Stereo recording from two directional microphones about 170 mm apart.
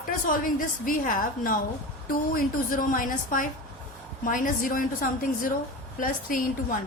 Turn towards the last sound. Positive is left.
turn(degrees=55)  # may be behind; listen again after turning